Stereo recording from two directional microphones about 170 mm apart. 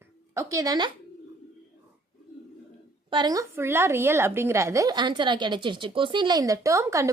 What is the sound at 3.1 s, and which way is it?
A woman's voice, 25° right (ahead or behind).